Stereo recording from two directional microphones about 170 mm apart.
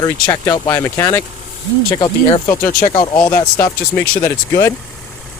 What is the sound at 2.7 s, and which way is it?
Speech, 55° left (ahead or behind).